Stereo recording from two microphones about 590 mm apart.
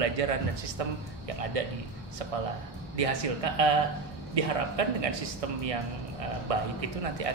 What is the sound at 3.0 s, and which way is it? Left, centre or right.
Speech, right.